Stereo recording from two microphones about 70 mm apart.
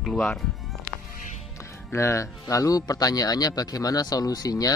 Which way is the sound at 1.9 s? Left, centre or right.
Left.